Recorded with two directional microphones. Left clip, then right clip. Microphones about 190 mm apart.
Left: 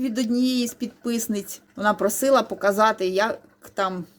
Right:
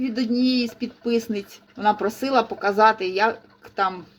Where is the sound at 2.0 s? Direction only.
50° left (ahead or behind).